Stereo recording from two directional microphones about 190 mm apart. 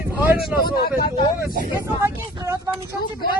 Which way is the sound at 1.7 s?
15° right (ahead or behind).